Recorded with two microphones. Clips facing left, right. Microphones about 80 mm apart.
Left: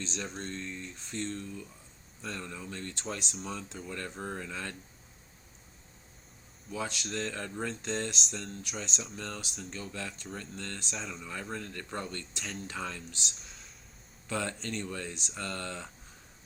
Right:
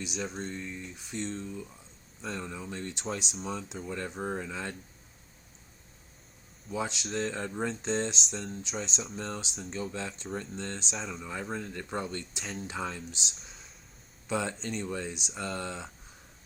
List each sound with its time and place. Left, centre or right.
0.2 s speech: centre
0.5 s speech: centre
3.3 s speech: centre
3.8 s speech: centre
6.7 s speech: right
8.3 s speech: centre
9.8 s speech: right
10.9 s speech: centre
11.2 s speech: centre
13.3 s a sound: centre
14.3 s speech: centre